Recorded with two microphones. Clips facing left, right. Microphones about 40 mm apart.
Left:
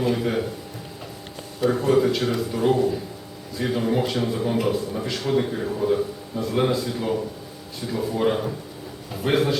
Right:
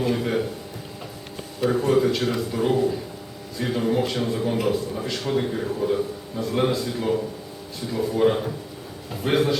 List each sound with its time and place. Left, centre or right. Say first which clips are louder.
0.0 s a man's voice: even; centre
1.6 s a man's voice: left 1 dB; centre